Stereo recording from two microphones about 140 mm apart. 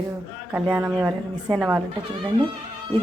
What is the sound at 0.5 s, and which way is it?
A woman's voice, 10° right (ahead or behind).